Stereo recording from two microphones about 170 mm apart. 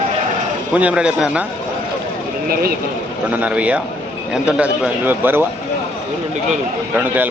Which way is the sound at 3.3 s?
10° right (ahead or behind).